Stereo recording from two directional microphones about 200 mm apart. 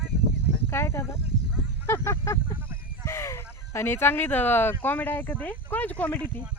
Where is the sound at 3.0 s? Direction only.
15° left (ahead or behind).